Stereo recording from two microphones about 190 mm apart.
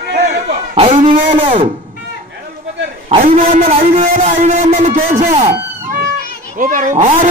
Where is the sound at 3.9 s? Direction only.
45° right (ahead or behind).